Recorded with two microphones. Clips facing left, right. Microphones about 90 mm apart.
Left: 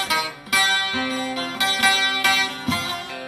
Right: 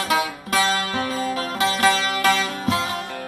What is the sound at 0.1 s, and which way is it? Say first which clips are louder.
Music: right 6 dB; 40° right (ahead or behind).